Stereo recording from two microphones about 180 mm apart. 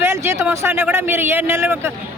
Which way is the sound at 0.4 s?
15° right (ahead or behind).